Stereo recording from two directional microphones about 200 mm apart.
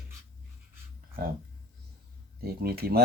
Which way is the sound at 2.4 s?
50° right (ahead or behind).